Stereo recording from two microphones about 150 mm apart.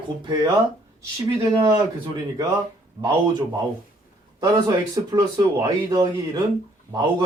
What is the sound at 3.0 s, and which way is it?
Speech, 30° right (ahead or behind).